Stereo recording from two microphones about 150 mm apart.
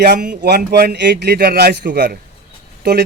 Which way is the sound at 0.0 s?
90° right.